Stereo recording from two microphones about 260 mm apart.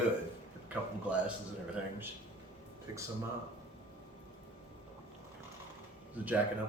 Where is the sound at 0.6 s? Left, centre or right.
Centre.